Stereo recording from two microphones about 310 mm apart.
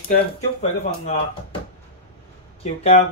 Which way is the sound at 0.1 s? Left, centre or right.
Left.